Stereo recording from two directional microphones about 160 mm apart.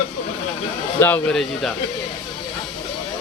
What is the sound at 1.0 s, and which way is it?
Speech, 10° left (ahead or behind).